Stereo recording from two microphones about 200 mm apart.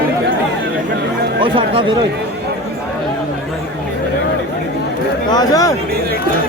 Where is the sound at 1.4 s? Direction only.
25° right (ahead or behind).